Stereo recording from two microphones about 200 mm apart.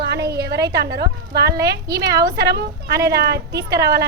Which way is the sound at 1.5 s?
20° right (ahead or behind).